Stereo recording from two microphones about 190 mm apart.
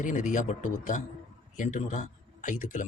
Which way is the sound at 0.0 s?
45° left (ahead or behind).